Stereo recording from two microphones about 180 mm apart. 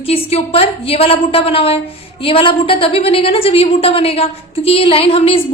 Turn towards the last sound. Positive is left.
turn(degrees=30)  # may be behind; listen again after turning